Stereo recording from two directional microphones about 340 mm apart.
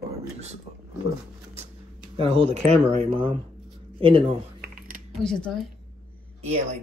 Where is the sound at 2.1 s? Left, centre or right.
Centre.